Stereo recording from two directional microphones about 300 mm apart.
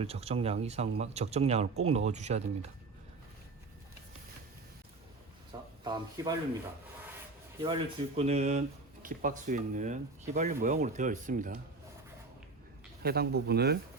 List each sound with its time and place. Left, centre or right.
0.0 s speech: centre
5.8 s speech: centre
7.6 s speech: centre
13.0 s speech: right